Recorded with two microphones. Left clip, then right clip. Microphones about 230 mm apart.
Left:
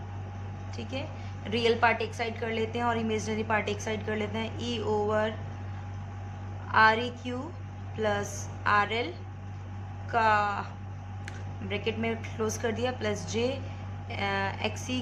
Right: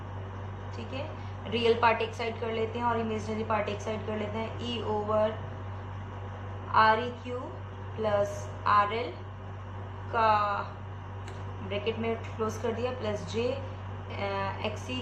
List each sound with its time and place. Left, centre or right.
1.5 s a woman's voice: left
6.7 s a woman's voice: left
8.0 s a woman's voice: left
10.1 s a woman's voice: left
11.7 s a woman's voice: left